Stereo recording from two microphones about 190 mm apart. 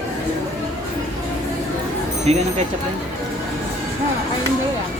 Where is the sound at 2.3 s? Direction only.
35° right (ahead or behind).